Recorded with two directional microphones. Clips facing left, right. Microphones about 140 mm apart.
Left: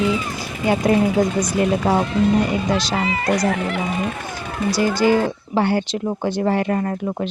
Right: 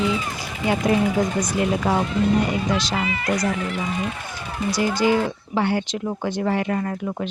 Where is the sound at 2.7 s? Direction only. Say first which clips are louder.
Left 3 dB; 35° left (ahead or behind).